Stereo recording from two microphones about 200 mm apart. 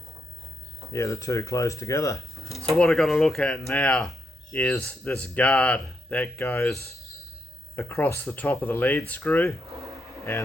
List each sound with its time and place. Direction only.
0.9 s speech: 15° left (ahead or behind)
2.6 s speech: centre (ahead or behind)
7.8 s speech: 15° left (ahead or behind)